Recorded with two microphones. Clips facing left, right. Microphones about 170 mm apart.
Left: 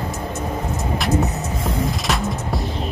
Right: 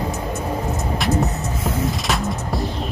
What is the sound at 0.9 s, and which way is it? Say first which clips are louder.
Music: left 1 dB; centre (ahead or behind).